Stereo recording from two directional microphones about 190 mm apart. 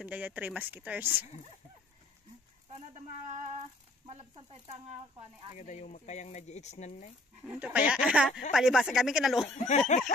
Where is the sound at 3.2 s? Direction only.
40° right (ahead or behind).